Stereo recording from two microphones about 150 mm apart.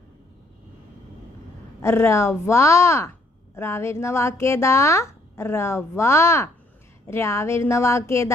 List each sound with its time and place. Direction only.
1.8 s a woman's voice: 15° left (ahead or behind)